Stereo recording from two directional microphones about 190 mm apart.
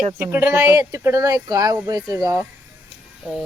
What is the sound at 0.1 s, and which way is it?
Speech, 10° right (ahead or behind).